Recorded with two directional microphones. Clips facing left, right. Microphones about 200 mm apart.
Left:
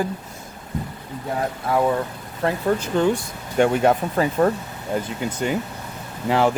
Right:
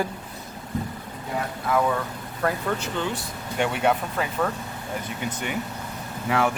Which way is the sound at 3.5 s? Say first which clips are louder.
Left 6 dB; 40° left (ahead or behind).